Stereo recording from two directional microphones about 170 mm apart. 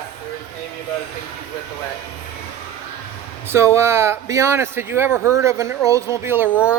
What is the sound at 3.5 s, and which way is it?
Speech, 15° right (ahead or behind).